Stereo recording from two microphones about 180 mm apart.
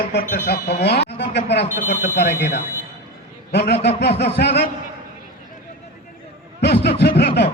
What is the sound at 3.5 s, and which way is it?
Speech, 70° left (ahead or behind).